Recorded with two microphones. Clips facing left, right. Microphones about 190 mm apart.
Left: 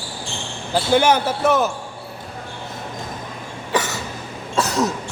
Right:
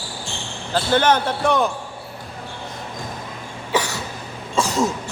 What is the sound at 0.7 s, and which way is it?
Speech, 10° left (ahead or behind).